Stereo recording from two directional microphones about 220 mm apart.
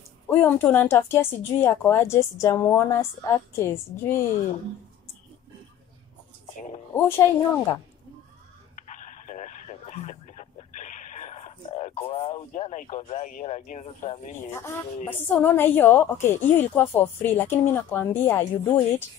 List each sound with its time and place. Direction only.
0.3 s a woman's voice: 10° left (ahead or behind)
6.9 s a woman's voice: 10° left (ahead or behind)
8.7 s radio: 35° left (ahead or behind)
15.0 s a woman's voice: 10° left (ahead or behind)